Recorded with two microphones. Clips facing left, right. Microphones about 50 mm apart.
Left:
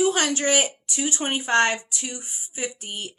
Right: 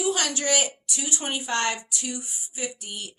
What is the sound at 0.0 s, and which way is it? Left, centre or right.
A woman's voice, left.